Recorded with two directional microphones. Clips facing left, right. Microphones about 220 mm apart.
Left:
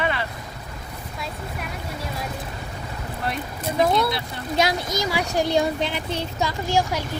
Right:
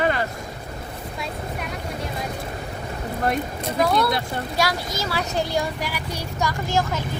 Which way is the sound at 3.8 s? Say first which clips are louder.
Even; 20° left (ahead or behind).